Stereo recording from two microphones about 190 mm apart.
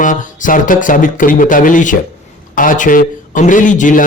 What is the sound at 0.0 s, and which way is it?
A man's voice, 45° left (ahead or behind).